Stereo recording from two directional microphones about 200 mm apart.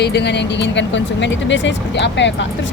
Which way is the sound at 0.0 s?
55° left (ahead or behind).